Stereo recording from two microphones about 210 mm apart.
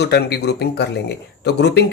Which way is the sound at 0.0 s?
50° left (ahead or behind).